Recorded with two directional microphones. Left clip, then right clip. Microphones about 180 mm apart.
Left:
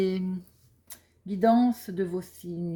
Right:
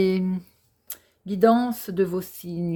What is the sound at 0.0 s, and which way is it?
Speech, 35° right (ahead or behind).